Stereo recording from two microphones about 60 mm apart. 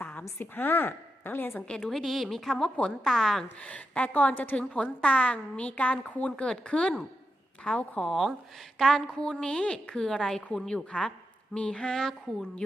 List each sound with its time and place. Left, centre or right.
0.0 s a sound: left
0.3 s a woman's voice: left
1.6 s a woman's voice: centre
3.6 s a woman's voice: left